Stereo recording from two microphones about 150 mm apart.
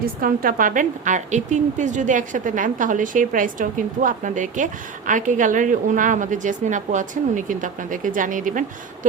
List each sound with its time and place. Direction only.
0.0 s a woman's voice: 70° right (ahead or behind)